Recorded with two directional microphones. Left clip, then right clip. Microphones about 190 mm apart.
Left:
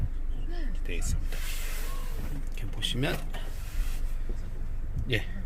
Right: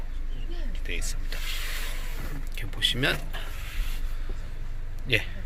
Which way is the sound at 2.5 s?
15° left (ahead or behind).